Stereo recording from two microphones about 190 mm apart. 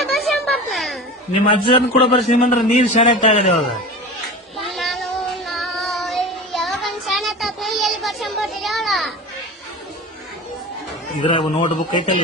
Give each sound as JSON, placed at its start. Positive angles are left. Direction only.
{"t": 0.0, "sound": "a sound", "side_deg": 0}
{"t": 1.3, "sound": "a man's voice", "side_deg": 30}
{"t": 4.5, "sound": "child singing", "side_deg": 0}
{"t": 11.3, "sound": "a man's voice", "side_deg": 25}